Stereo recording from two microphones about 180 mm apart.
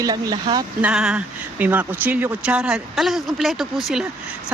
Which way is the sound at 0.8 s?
5° right (ahead or behind).